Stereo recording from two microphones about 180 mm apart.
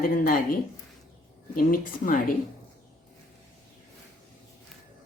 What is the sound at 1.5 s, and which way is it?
Speech, 50° left (ahead or behind).